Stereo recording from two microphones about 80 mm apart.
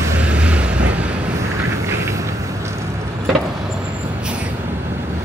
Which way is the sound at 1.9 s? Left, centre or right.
Right.